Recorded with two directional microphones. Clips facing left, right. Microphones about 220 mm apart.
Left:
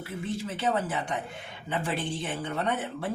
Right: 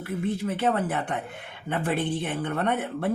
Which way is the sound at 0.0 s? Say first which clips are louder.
Right 5 dB; 55° right (ahead or behind).